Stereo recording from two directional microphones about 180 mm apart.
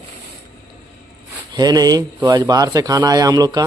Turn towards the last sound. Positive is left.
turn(degrees=-20)  # may be behind; listen again after turning